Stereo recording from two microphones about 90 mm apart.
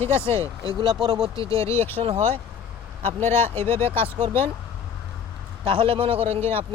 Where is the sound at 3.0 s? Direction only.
25° left (ahead or behind).